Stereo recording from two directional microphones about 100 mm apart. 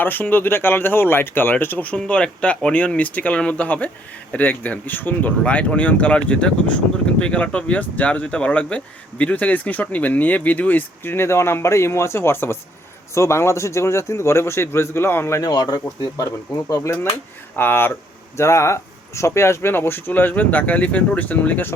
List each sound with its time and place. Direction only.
0.0 s speech: 20° left (ahead or behind)
15.4 s speech: 40° left (ahead or behind)
17.6 s speech: 20° left (ahead or behind)